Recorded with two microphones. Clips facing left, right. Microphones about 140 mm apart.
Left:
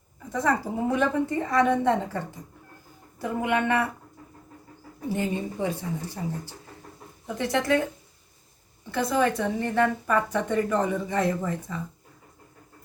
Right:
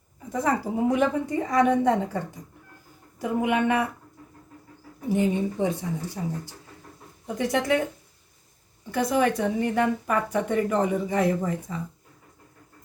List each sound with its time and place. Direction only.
0.3 s a woman's voice: 10° right (ahead or behind)
5.0 s a woman's voice: 20° right (ahead or behind)
8.9 s a woman's voice: 15° right (ahead or behind)